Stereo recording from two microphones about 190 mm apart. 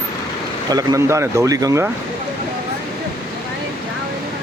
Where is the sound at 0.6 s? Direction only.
20° right (ahead or behind).